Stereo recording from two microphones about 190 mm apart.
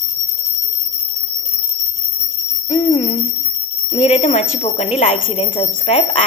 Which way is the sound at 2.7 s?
35° left (ahead or behind).